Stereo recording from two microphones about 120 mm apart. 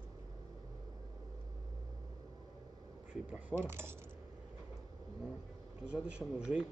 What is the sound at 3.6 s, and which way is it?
Speech, 20° right (ahead or behind).